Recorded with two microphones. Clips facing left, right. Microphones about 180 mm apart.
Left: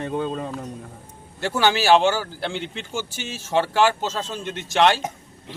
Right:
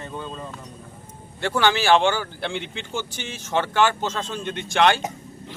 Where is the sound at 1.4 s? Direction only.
5° left (ahead or behind).